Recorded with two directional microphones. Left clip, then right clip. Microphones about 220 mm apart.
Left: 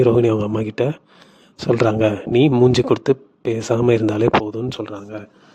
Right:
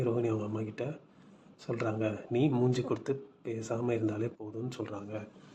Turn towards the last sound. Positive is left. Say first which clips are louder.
# left 11 dB
turn(degrees=40)  # may be behind; listen again after turning